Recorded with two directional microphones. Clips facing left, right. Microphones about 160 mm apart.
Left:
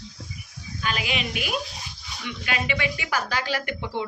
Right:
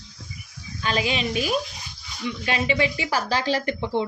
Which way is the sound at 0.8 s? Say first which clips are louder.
Right 4 dB; 30° right (ahead or behind).